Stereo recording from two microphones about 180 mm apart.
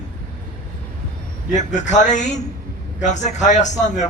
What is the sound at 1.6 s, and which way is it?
A man's voice, 40° left (ahead or behind).